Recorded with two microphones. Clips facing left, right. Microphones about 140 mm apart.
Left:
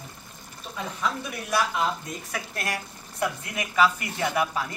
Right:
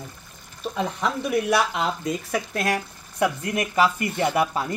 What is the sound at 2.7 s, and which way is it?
Speech, 55° right (ahead or behind).